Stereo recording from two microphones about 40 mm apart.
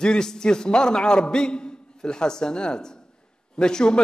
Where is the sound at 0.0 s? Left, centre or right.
Centre.